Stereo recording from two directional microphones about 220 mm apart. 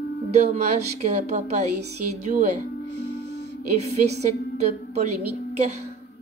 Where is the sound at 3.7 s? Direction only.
30° right (ahead or behind).